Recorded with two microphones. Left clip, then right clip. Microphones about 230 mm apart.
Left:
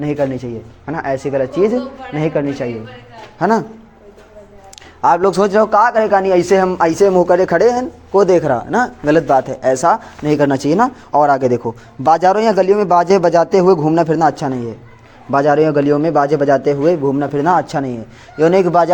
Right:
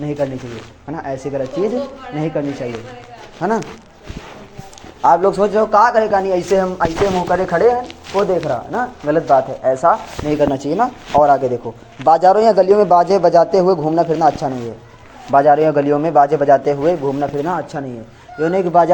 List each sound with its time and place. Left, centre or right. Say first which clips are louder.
0.0 s a man's voice: left 3 dB; left
5.0 s a man's voice: even; left